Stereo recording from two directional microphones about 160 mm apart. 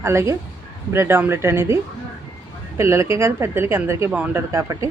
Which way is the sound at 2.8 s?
15° right (ahead or behind).